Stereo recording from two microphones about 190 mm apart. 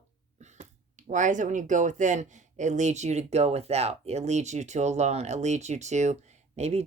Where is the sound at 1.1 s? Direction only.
40° right (ahead or behind).